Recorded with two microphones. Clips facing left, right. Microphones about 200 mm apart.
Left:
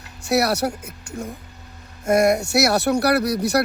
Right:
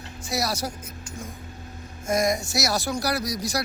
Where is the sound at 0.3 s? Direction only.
65° left (ahead or behind).